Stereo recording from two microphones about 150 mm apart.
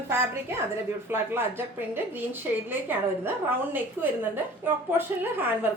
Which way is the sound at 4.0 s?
15° right (ahead or behind).